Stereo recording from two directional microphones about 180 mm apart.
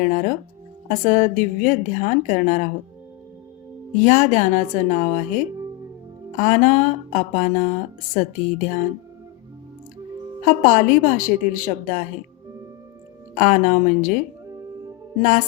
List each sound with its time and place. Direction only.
0.0 s speech: 45° left (ahead or behind)
3.9 s speech: 45° left (ahead or behind)
10.4 s speech: 45° left (ahead or behind)
13.3 s speech: 45° left (ahead or behind)